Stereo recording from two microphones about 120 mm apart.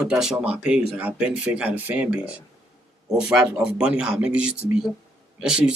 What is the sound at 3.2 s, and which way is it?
A man's voice, 10° right (ahead or behind).